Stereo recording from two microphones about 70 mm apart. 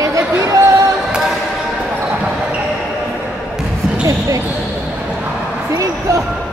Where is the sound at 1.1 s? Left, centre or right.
Centre.